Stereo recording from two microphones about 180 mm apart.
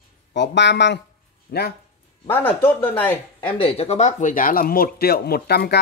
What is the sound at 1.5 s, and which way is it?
Speech, 60° left (ahead or behind).